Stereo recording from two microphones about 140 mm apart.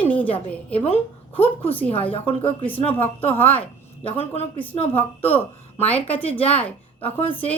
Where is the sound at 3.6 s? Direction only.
40° left (ahead or behind).